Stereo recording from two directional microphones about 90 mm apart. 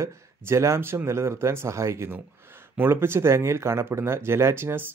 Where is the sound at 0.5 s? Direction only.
30° right (ahead or behind).